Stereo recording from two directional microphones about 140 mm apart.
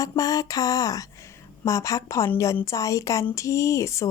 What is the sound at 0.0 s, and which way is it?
Speech, 25° left (ahead or behind).